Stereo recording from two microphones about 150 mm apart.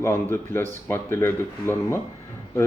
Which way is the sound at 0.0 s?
15° left (ahead or behind).